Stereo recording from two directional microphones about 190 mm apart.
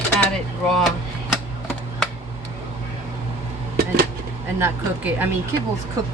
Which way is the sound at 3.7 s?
55° right (ahead or behind).